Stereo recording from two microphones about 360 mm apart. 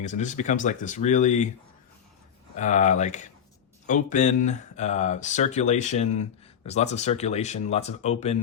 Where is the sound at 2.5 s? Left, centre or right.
Centre.